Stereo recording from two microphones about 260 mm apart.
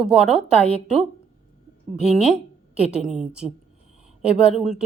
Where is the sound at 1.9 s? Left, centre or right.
Centre.